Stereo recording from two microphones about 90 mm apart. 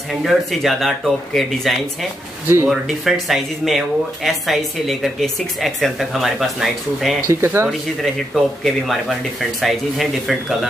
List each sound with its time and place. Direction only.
0.1 s speech: centre (ahead or behind)
7.2 s speech: 30° right (ahead or behind)
8.0 s speech: centre (ahead or behind)